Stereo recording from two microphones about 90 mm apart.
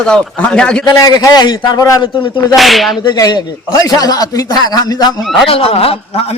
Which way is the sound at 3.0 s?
50° left (ahead or behind).